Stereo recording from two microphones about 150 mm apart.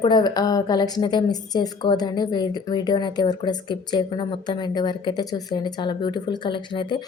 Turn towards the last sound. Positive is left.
turn(degrees=30)  # may be behind; listen again after turning